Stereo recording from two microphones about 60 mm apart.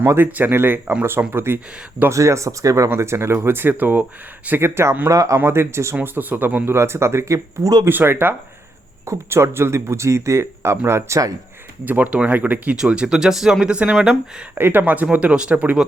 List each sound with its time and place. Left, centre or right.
0.3 s speech: right
2.0 s speech: right
2.9 s speech: right
4.6 s speech: right
5.0 s speech: right
5.5 s speech: right
6.0 s speech: right
6.7 s speech: right
7.9 s speech: right
11.9 s speech: right
12.7 s speech: centre
14.6 s speech: right
15.1 s speech: right